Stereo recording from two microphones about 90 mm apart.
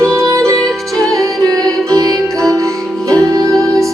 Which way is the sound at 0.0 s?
35° right (ahead or behind).